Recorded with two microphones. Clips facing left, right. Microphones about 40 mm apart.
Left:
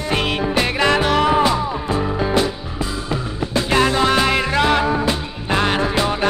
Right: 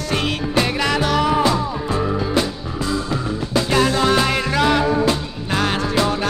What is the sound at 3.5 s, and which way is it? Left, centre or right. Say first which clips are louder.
Music: left 1 dB; centre.